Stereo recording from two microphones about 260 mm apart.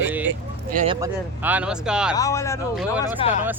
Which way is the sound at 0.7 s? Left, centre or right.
Right.